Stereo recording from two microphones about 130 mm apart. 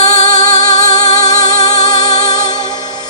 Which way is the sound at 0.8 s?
30° left (ahead or behind).